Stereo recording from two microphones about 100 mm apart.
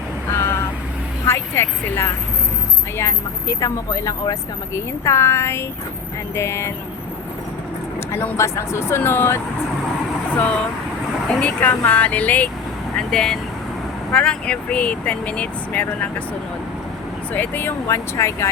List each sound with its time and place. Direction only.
1.3 s speech: 25° left (ahead or behind)
8.1 s speech: 25° left (ahead or behind)
17.3 s speech: 20° left (ahead or behind)